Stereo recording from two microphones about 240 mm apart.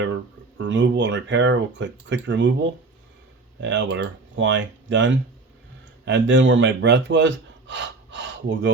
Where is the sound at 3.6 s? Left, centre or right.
Right.